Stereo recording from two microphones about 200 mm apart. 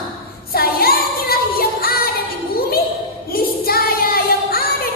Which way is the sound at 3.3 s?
50° left (ahead or behind).